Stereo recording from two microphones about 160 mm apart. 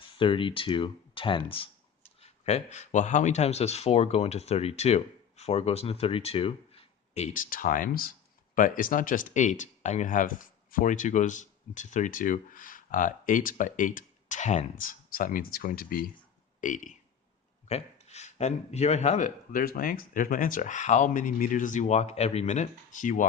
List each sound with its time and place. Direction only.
0.2 s speech: 30° left (ahead or behind)
7.5 s speech: 60° left (ahead or behind)
16.6 s speech: 50° left (ahead or behind)
17.7 s speech: 40° left (ahead or behind)